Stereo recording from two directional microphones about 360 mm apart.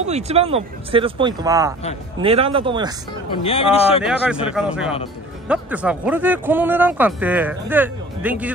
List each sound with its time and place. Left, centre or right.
0.0 s speech: centre
3.3 s speech: centre
4.0 s speech: centre